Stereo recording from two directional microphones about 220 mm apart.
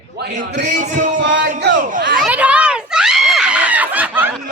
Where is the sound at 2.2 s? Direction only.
5° right (ahead or behind).